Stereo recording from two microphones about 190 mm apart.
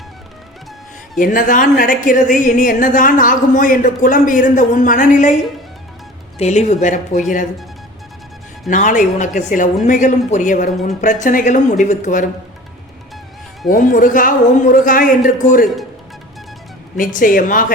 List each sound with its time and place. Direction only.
1.2 s a woman's voice: 45° left (ahead or behind)
6.4 s a woman's voice: 35° left (ahead or behind)
8.7 s a woman's voice: 40° left (ahead or behind)
13.7 s a woman's voice: 45° left (ahead or behind)
17.0 s a woman's voice: 45° left (ahead or behind)